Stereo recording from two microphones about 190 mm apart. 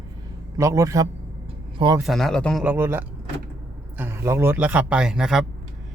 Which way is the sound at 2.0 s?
Centre (ahead or behind).